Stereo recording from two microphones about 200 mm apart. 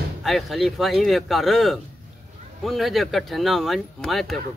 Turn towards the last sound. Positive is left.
turn(degrees=0)  # may be behind; listen again after turning